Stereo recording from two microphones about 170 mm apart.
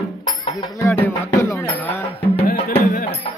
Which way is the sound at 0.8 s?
15° left (ahead or behind).